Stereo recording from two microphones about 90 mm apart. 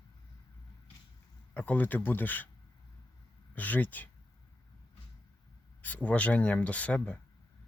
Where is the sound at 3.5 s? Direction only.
20° left (ahead or behind).